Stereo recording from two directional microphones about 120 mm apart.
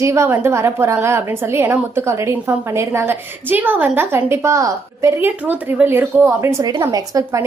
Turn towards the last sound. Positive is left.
turn(degrees=-30)  # may be behind; listen again after turning